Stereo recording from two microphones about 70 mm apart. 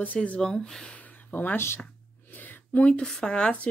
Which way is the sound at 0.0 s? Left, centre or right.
Left.